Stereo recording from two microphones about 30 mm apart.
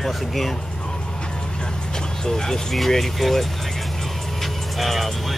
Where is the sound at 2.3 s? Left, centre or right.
Centre.